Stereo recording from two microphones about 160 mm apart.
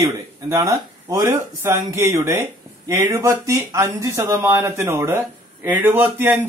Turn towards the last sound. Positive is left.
turn(degrees=-15)  # may be behind; listen again after turning